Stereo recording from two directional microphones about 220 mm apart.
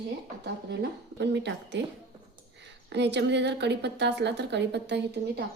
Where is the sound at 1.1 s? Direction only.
50° right (ahead or behind).